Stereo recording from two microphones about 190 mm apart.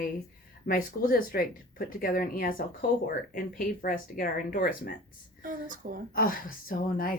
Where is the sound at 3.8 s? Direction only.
50° left (ahead or behind).